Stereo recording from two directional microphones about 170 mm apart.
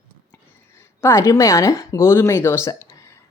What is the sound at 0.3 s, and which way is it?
Speech, 15° left (ahead or behind).